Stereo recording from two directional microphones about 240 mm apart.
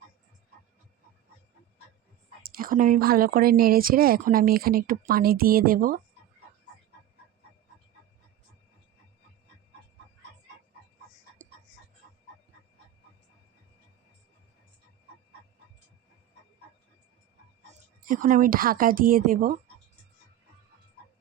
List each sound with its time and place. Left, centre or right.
2.4 s speech: right
18.0 s speech: right